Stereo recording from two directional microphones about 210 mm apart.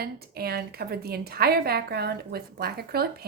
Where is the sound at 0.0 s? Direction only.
45° right (ahead or behind).